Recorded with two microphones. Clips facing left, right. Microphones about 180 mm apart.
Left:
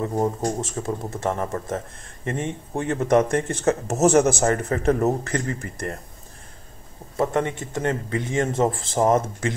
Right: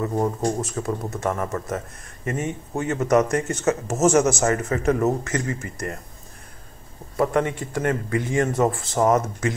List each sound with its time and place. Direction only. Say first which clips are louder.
0.2 s speech: even; 25° left (ahead or behind)
7.2 s speech: right 1 dB; 25° left (ahead or behind)